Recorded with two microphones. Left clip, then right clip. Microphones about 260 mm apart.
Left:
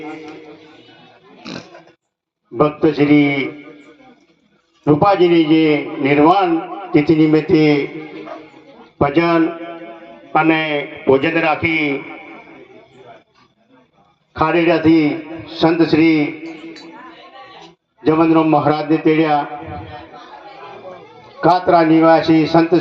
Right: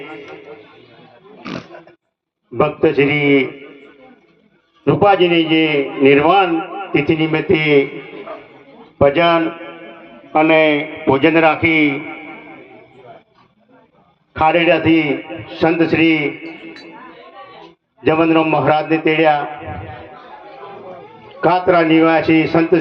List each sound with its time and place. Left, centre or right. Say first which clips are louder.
1.4 s pig: right 2 dB; centre
2.6 s a man's voice: right 1 dB; centre
5.0 s a man's voice: right 1 dB; centre
9.0 s a man's voice: right 2 dB; right
14.4 s a man's voice: right 1 dB; centre
18.1 s a man's voice: left 1 dB; centre
21.4 s a man's voice: left 1 dB; centre